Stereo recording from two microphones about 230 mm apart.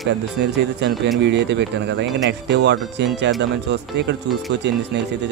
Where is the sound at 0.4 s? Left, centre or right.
Right.